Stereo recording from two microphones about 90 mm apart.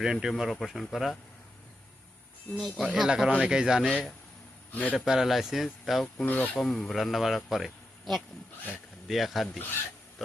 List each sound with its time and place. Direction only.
0.0 s speech: 5° right (ahead or behind)
2.6 s a man's voice: centre (ahead or behind)
4.7 s a man's voice: 15° left (ahead or behind)
4.9 s speech: 5° right (ahead or behind)
6.1 s speech: 15° left (ahead or behind)
10.2 s pig: centre (ahead or behind)